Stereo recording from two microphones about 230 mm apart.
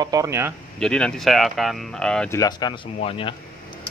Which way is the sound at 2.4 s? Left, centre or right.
Centre.